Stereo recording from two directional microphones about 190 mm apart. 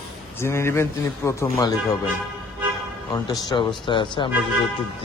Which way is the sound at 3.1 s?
20° left (ahead or behind).